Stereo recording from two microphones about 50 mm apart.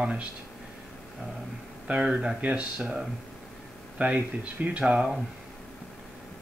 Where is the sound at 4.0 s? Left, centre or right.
Right.